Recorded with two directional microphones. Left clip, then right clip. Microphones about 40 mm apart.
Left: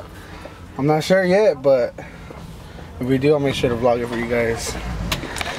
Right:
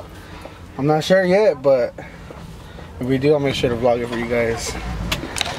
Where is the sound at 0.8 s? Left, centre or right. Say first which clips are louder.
Right 1 dB; centre.